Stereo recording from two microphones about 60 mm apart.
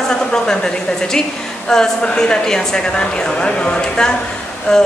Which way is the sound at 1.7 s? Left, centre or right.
Centre.